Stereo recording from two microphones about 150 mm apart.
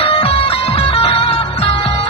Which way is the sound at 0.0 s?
40° left (ahead or behind).